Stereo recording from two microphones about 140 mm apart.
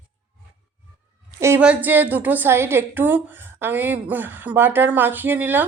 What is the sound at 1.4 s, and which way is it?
A woman's voice, 20° right (ahead or behind).